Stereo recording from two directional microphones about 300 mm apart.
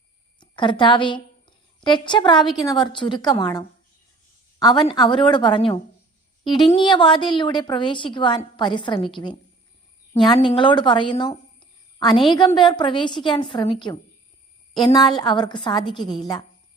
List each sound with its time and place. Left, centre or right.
0.3 s a woman's voice: centre